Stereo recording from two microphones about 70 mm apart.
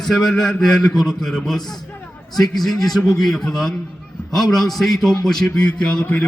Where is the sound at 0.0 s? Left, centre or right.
Centre.